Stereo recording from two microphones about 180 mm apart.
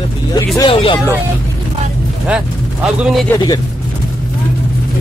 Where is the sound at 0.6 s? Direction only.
30° left (ahead or behind).